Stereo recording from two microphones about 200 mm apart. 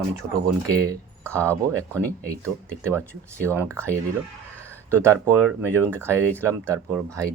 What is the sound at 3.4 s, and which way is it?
Speech, 10° right (ahead or behind).